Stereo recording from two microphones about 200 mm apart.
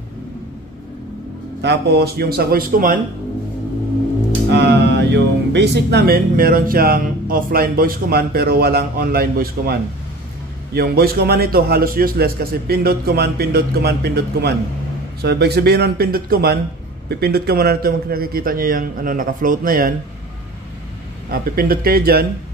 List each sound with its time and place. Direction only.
1.6 s speech: 55° right (ahead or behind)
4.5 s speech: 60° right (ahead or behind)
21.3 s speech: 50° right (ahead or behind)